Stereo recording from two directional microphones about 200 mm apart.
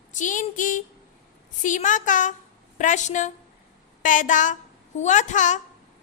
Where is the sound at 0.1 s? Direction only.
40° left (ahead or behind).